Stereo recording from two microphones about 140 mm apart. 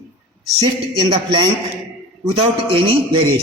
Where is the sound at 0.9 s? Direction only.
30° right (ahead or behind).